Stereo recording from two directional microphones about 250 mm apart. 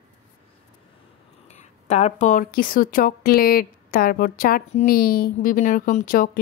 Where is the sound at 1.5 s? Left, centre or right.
Left.